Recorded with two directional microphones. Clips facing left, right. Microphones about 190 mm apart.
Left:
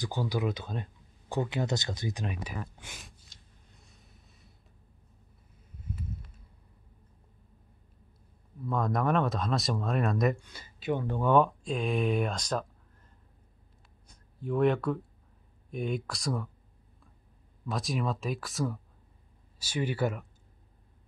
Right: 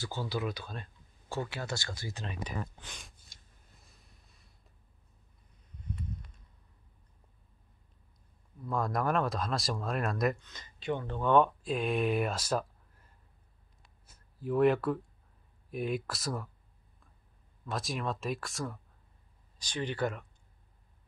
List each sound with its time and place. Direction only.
0.0 s speech: 15° left (ahead or behind)
3.7 s vehicle: centre (ahead or behind)
5.8 s a sound: 5° left (ahead or behind)
8.6 s speech: centre (ahead or behind)
14.0 s a sound: 5° right (ahead or behind)
15.7 s speech: 5° right (ahead or behind)
17.6 s speech: centre (ahead or behind)